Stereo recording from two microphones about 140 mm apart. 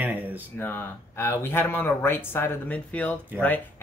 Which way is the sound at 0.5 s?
15° left (ahead or behind).